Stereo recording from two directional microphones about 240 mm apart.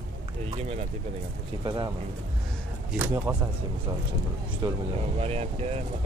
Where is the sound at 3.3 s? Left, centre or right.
Centre.